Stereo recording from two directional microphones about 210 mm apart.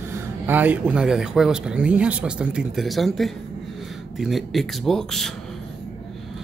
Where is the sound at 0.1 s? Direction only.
10° right (ahead or behind).